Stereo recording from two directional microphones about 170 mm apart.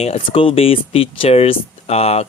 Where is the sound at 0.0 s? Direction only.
35° left (ahead or behind).